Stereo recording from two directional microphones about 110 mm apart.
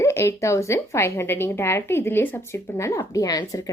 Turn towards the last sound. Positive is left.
turn(degrees=35)  # may be behind; listen again after turning